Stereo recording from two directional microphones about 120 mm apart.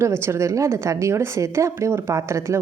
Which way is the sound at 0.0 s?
20° right (ahead or behind).